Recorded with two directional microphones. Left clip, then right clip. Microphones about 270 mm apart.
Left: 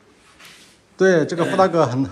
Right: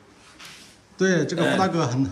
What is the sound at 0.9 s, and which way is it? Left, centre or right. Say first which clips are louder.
A man's voice: left 6 dB; centre.